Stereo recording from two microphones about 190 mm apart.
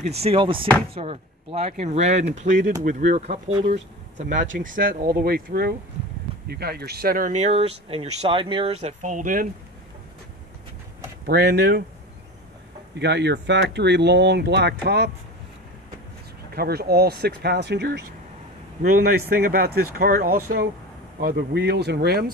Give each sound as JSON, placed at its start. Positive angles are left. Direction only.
{"t": 0.2, "sound": "speech", "side_deg": -30}
{"t": 11.2, "sound": "speech", "side_deg": -60}
{"t": 12.9, "sound": "speech", "side_deg": -65}
{"t": 16.5, "sound": "speech", "side_deg": -55}